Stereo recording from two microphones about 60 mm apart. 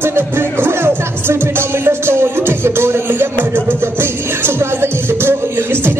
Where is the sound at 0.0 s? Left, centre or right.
Right.